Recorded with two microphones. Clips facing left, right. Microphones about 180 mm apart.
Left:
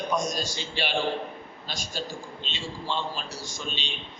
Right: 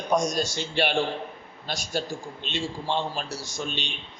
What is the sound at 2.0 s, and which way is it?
A man's voice, 55° right (ahead or behind).